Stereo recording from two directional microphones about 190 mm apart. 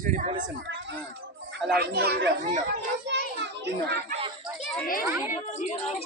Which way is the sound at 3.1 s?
65° right (ahead or behind).